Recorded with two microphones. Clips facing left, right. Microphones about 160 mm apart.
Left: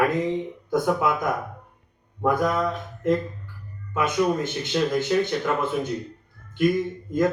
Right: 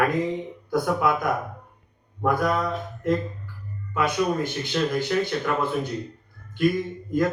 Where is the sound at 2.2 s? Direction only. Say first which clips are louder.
Left 1 dB; 20° left (ahead or behind).